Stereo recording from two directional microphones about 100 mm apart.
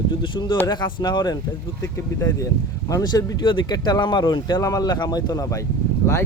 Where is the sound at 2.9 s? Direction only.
35° left (ahead or behind).